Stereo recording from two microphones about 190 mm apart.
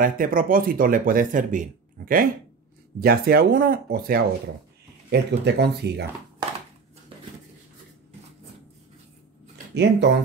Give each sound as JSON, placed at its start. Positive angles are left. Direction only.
{"t": 0.0, "sound": "speech", "side_deg": -45}
{"t": 9.8, "sound": "speech", "side_deg": -60}